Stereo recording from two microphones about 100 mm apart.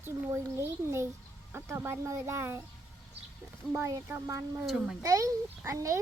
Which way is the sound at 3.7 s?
30° right (ahead or behind).